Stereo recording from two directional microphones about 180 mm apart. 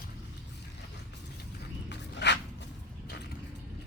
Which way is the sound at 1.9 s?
75° left (ahead or behind).